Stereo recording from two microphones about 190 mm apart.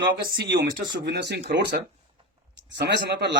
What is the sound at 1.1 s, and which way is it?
Speech, 60° right (ahead or behind).